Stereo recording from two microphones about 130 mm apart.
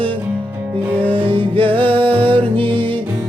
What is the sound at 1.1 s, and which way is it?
Music, 40° right (ahead or behind).